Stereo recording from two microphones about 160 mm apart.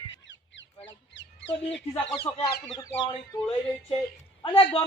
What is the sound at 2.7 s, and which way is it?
Speech, 20° left (ahead or behind).